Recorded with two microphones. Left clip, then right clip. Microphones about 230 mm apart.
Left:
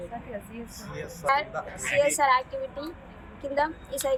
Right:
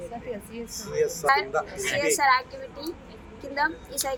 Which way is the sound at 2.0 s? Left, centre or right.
Centre.